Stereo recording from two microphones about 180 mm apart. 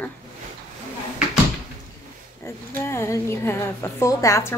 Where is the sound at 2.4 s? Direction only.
15° left (ahead or behind).